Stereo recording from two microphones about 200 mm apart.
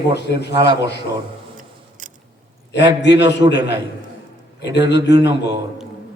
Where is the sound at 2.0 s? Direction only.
40° right (ahead or behind).